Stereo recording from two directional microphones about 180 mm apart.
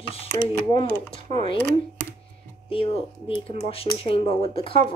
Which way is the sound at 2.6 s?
30° left (ahead or behind).